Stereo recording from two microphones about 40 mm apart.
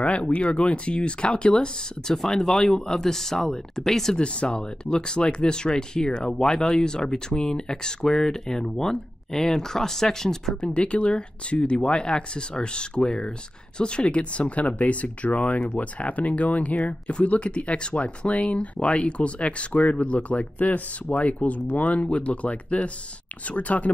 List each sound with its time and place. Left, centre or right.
0.4 s speech: left; by 4.2 s centre
4.2 s speech: left
10.6 s speech: left